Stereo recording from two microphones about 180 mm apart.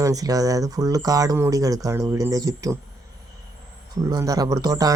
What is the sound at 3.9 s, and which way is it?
Speech, 20° right (ahead or behind).